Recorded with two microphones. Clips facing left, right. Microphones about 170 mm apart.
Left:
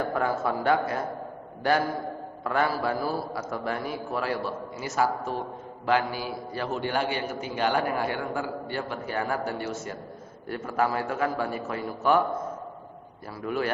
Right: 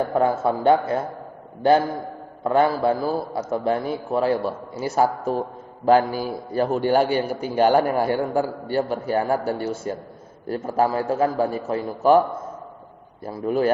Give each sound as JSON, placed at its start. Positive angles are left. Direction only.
{"t": 0.1, "sound": "a man's voice", "side_deg": -25}
{"t": 2.4, "sound": "a man's voice", "side_deg": -25}
{"t": 13.2, "sound": "a man's voice", "side_deg": -35}